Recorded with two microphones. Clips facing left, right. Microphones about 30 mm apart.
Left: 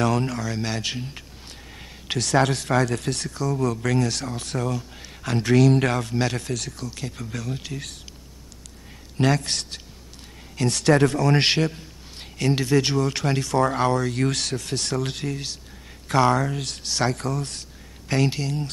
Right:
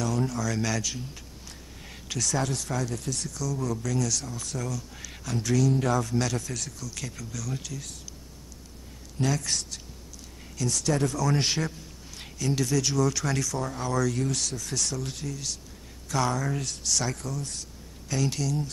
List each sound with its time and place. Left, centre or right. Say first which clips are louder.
0.0 s a sound: left 6 dB; left
0.4 s speech: left 1 dB; left
5.7 s speech: left 4 dB; left
7.1 s speech: left 5 dB; left
9.2 s speech: left 6 dB; left
10.6 s a man's voice: left 8 dB; left
12.5 s speech: left 4 dB; left
13.6 s speech: left 8 dB; left
18.3 s speech: left 1 dB; left